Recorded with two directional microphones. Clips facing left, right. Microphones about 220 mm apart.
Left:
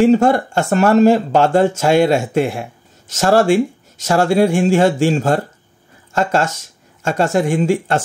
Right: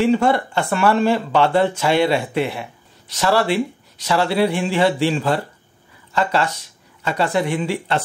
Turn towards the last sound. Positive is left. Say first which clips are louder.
# left 6 dB
turn(degrees=45)  # may be behind; listen again after turning